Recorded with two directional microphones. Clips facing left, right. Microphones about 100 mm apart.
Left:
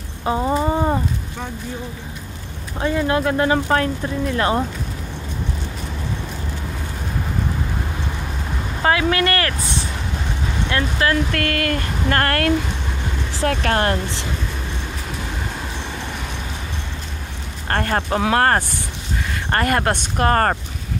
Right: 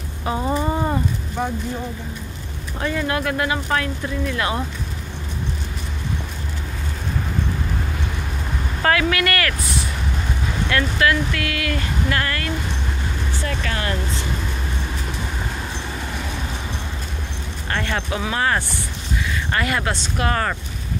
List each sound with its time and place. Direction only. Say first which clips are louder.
0.2 s a sound: left 3 dB; 25° left (ahead or behind)
2.8 s speech: left 4 dB; 25° left (ahead or behind)
8.8 s speech: left 1 dB; 25° left (ahead or behind)
10.7 s speech: right 1 dB; 30° left (ahead or behind)
11.3 s speech: left 4 dB; 50° left (ahead or behind)
17.6 s speech: left 4 dB; 45° left (ahead or behind)
18.2 s speech: left 5 dB; 60° left (ahead or behind)
19.2 s speech: left 3 dB; 50° left (ahead or behind)